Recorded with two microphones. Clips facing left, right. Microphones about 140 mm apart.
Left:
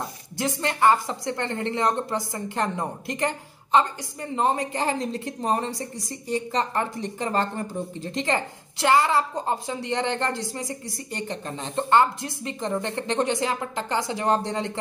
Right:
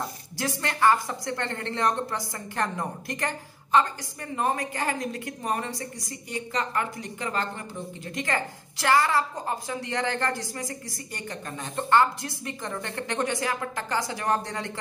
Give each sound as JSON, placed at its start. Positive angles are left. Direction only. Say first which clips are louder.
{"t": 0.4, "sound": "a woman's voice", "louder": "left 2 dB", "side_deg": 20}